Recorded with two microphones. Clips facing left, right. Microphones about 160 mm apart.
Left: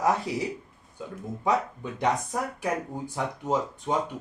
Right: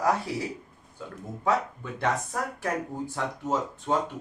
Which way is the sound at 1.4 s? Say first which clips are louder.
Even; 15° left (ahead or behind).